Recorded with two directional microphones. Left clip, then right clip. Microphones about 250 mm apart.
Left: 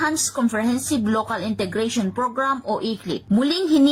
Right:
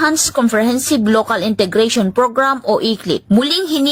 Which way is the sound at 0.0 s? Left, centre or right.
Right.